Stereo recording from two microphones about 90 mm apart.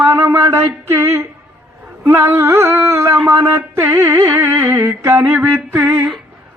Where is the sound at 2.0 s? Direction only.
30° right (ahead or behind).